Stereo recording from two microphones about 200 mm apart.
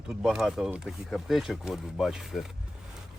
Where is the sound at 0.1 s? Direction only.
5° right (ahead or behind).